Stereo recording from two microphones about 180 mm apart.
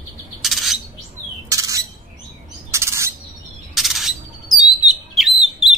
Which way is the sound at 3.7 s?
Centre (ahead or behind).